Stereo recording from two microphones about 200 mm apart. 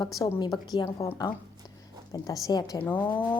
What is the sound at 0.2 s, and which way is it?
A woman's voice, 20° left (ahead or behind).